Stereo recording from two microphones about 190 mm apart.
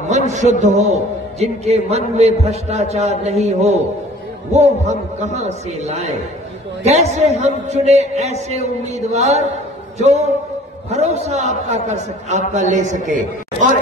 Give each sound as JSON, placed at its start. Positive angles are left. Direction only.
{"t": 0.3, "sound": "a man's voice", "side_deg": -40}